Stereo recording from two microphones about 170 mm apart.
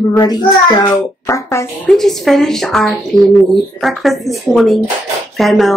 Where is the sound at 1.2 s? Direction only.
15° left (ahead or behind).